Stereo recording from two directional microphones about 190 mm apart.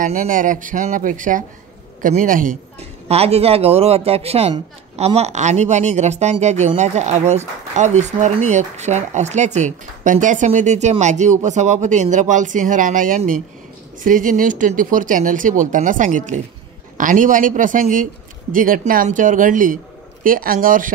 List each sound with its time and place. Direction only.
0.0 s a man's voice: 40° right (ahead or behind)